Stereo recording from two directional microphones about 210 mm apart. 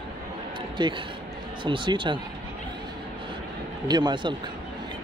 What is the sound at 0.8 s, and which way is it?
Speech, 20° right (ahead or behind).